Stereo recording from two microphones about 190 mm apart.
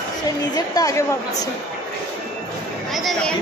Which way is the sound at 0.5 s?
20° left (ahead or behind).